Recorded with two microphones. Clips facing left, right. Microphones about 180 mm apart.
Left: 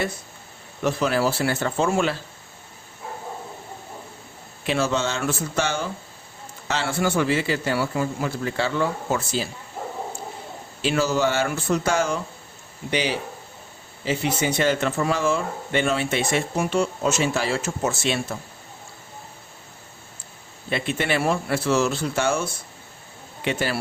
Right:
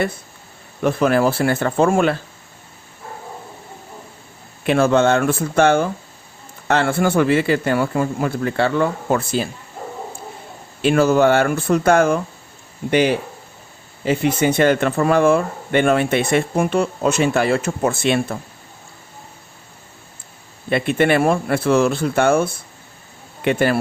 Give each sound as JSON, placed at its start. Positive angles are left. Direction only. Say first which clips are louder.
{"t": 0.8, "sound": "speech", "louder": "right 6 dB", "side_deg": -55}
{"t": 4.6, "sound": "speech", "louder": "right 8 dB", "side_deg": -55}
{"t": 10.8, "sound": "speech", "louder": "right 8 dB", "side_deg": -55}
{"t": 20.7, "sound": "a man's voice", "louder": "right 8 dB", "side_deg": -55}